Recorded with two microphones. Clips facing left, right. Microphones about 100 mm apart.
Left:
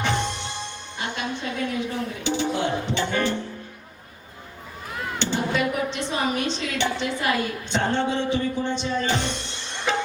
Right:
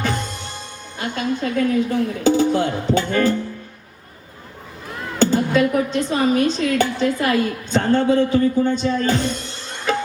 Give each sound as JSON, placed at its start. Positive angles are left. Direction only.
{"t": 0.0, "sound": "music", "side_deg": -40}
{"t": 0.9, "sound": "speech", "side_deg": -45}
{"t": 5.2, "sound": "speech", "side_deg": -40}